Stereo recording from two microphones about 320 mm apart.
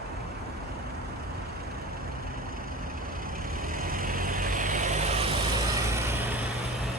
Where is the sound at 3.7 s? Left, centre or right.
Right.